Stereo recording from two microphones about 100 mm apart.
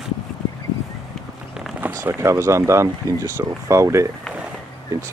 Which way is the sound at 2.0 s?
30° right (ahead or behind).